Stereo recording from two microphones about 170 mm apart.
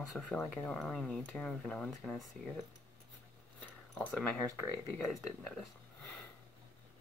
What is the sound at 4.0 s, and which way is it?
Speech, 10° left (ahead or behind).